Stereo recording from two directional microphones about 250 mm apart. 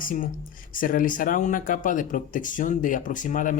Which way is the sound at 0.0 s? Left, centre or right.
Left.